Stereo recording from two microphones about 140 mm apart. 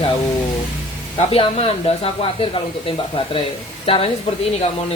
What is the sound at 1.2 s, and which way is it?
Speech, 45° left (ahead or behind).